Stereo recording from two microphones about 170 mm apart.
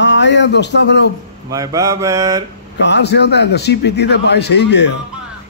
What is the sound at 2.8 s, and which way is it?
A man's voice, 90° left.